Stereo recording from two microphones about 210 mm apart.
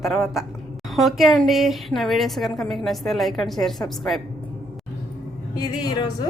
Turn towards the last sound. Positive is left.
turn(degrees=20)  # may be behind; listen again after turning